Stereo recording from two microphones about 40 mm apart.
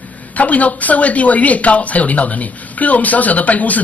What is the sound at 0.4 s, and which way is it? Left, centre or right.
Speech, left.